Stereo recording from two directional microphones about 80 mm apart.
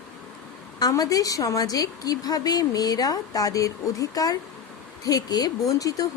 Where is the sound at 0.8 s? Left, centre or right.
Left.